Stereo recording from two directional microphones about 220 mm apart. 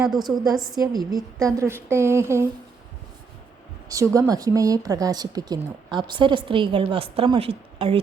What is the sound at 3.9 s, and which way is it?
A woman's voice, 15° right (ahead or behind).